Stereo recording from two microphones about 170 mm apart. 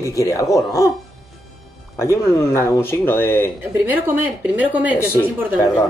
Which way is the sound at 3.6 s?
10° right (ahead or behind).